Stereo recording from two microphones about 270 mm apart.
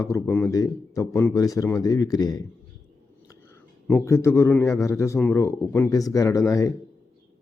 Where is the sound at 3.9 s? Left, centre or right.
Centre.